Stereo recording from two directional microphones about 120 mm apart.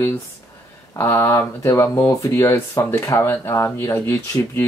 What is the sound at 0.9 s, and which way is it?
Speech, 20° left (ahead or behind).